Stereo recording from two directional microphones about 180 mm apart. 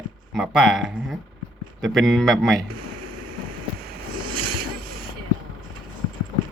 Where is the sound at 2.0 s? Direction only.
Centre (ahead or behind).